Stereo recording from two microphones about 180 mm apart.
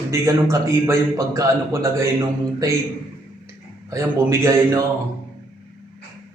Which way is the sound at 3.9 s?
15° right (ahead or behind).